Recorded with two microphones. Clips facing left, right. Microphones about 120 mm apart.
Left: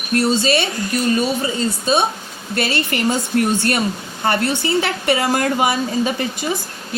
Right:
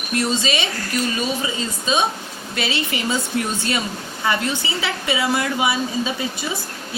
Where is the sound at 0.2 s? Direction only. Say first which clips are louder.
Left 5 dB; 45° left (ahead or behind).